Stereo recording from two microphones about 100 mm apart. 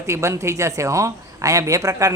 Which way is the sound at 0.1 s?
30° right (ahead or behind).